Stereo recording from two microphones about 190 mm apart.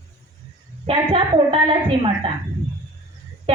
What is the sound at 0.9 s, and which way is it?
Speech, 30° right (ahead or behind).